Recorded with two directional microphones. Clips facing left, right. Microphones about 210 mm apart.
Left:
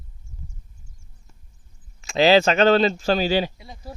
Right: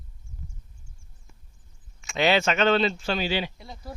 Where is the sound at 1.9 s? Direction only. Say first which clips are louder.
Left 7 dB; 35° left (ahead or behind).